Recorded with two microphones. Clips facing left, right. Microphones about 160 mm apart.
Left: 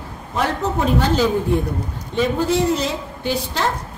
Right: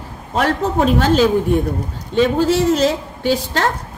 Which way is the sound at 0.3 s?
85° right.